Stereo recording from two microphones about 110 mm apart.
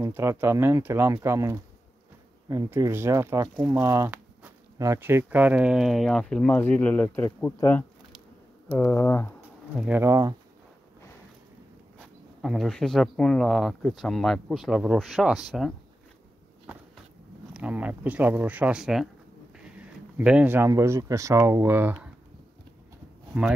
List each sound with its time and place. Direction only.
0.0 s speech: 25° right (ahead or behind); by 9.3 s 25° left (ahead or behind)
9.9 s speech: 30° right (ahead or behind)
12.4 s speech: centre (ahead or behind)
17.5 s speech: 10° right (ahead or behind)